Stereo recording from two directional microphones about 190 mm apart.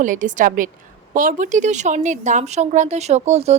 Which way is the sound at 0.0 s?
40° right (ahead or behind).